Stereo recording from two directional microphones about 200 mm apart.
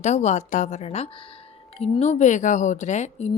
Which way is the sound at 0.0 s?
35° left (ahead or behind).